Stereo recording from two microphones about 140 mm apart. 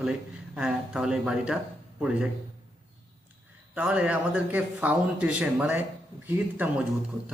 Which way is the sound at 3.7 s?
10° right (ahead or behind).